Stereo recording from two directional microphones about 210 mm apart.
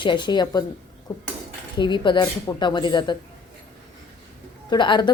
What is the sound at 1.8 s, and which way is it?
Speech, 20° left (ahead or behind).